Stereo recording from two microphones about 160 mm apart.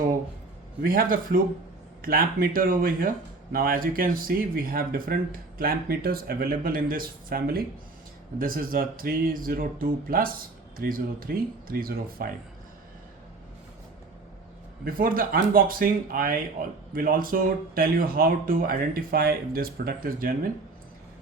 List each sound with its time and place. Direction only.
0.8 s speech: 65° right (ahead or behind)
14.8 s speech: 65° right (ahead or behind)